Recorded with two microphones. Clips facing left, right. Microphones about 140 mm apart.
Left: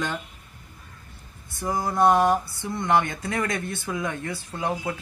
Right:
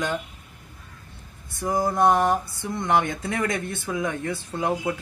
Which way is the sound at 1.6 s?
20° right (ahead or behind).